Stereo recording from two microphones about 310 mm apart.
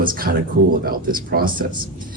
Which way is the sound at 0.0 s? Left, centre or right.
Right.